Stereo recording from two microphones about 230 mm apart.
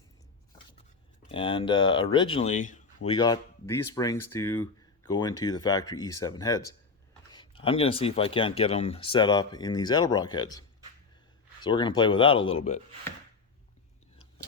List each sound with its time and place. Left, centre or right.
1.3 s speech: left
11.6 s speech: centre